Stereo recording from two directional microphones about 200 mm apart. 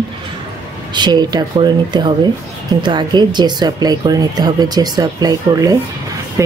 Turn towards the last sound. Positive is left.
turn(degrees=-15)  # may be behind; listen again after turning